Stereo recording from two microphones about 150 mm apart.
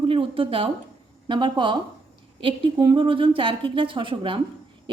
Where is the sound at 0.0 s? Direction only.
35° right (ahead or behind).